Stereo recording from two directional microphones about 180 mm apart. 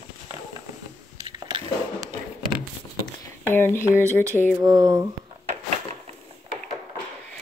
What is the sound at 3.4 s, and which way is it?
Speech, 10° left (ahead or behind).